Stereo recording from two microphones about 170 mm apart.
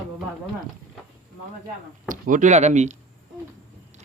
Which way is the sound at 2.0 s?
50° right (ahead or behind).